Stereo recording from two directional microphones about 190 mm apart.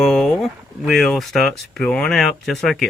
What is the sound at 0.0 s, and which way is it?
Speech, centre (ahead or behind).